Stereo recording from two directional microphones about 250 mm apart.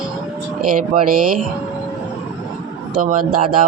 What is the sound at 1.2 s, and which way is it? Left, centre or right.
Speech, right.